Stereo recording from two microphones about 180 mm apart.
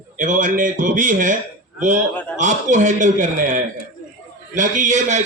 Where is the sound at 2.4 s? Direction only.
45° right (ahead or behind).